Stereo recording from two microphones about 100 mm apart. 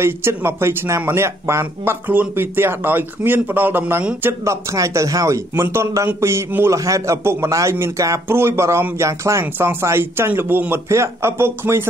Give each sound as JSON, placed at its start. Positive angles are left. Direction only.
{"t": 0.0, "sound": "a man's voice", "side_deg": -25}
{"t": 4.7, "sound": "a man's voice", "side_deg": -35}